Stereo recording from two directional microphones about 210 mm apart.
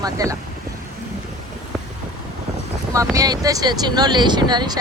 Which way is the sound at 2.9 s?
15° right (ahead or behind).